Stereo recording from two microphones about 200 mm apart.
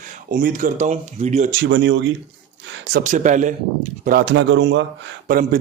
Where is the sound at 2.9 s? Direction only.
40° right (ahead or behind).